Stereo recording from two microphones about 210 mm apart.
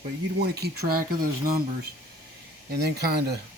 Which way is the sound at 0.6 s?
45° right (ahead or behind).